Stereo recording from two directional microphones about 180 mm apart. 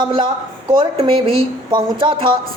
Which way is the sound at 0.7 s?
25° right (ahead or behind).